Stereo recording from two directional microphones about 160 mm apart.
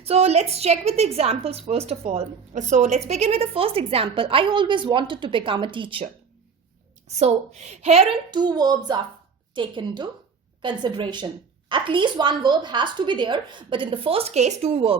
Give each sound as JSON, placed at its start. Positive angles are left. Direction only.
{"t": 0.0, "sound": "a woman's voice", "side_deg": -40}
{"t": 7.2, "sound": "a woman's voice", "side_deg": -45}